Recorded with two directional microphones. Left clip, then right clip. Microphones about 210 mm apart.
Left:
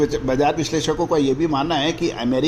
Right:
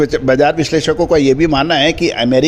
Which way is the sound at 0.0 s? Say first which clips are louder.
Right 7 dB; 45° right (ahead or behind).